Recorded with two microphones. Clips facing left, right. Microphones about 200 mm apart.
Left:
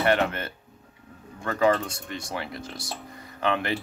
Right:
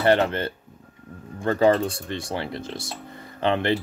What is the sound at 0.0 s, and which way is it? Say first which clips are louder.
Speech: right 4 dB; 30° right (ahead or behind).